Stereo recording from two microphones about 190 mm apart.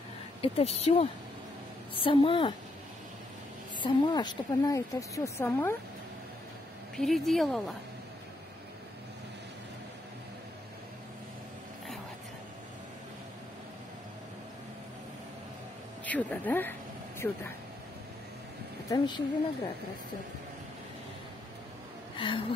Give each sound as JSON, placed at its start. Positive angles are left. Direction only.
{"t": 0.4, "sound": "a woman's voice", "side_deg": 35}
{"t": 3.8, "sound": "a woman's voice", "side_deg": 20}
{"t": 7.0, "sound": "speech", "side_deg": 0}
{"t": 16.1, "sound": "a woman's voice", "side_deg": 10}
{"t": 18.9, "sound": "a woman's voice", "side_deg": 20}
{"t": 22.1, "sound": "a sound", "side_deg": 25}